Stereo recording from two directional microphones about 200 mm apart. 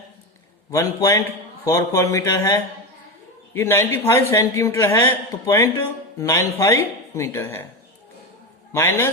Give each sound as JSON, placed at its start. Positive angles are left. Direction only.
{"t": 0.7, "sound": "a man's voice", "side_deg": 15}
{"t": 8.7, "sound": "a man's voice", "side_deg": 10}